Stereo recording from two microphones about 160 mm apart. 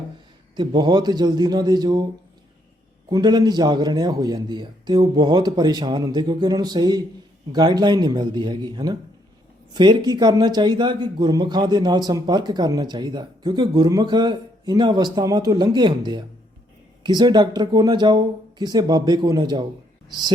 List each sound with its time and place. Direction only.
0.5 s speech: 25° right (ahead or behind)
3.1 s speech: 25° right (ahead or behind)